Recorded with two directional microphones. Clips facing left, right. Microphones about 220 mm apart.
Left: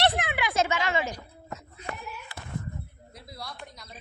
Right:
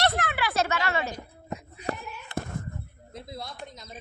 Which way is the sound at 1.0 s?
20° right (ahead or behind).